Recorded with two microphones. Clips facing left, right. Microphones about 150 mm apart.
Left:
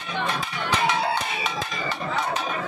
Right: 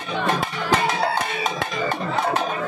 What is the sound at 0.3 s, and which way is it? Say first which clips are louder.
Music: right 8 dB; 50° right (ahead or behind).